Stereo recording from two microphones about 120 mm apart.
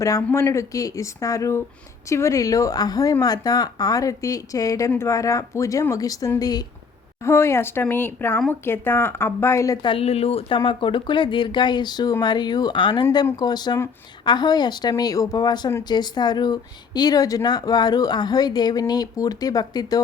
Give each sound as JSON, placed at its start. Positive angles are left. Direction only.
{"t": 0.0, "sound": "speech", "side_deg": 25}
{"t": 7.2, "sound": "speech", "side_deg": 25}
{"t": 9.8, "sound": "speech", "side_deg": 50}
{"t": 10.6, "sound": "speech", "side_deg": 45}